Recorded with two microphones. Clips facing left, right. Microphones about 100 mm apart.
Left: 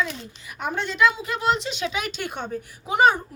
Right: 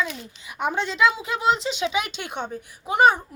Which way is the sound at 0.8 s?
25° right (ahead or behind).